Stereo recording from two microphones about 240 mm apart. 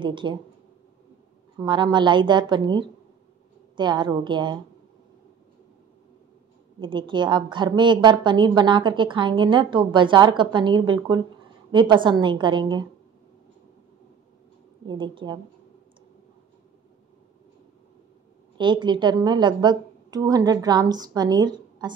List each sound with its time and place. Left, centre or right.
0.0 s a woman's voice: centre
1.6 s a woman's voice: centre
6.8 s a woman's voice: centre
14.9 s a woman's voice: centre
18.6 s a woman's voice: centre